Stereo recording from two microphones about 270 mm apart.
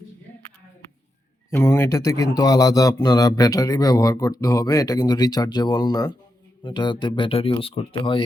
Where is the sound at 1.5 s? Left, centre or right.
Centre.